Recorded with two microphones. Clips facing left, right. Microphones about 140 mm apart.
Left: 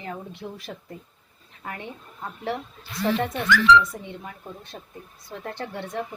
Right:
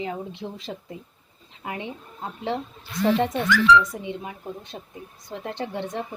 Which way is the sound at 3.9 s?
15° right (ahead or behind).